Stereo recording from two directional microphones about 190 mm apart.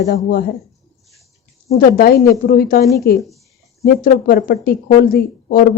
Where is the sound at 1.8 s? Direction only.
50° left (ahead or behind).